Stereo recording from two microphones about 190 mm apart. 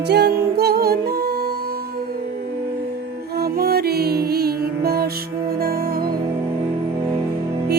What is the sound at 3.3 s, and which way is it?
Music, 55° right (ahead or behind).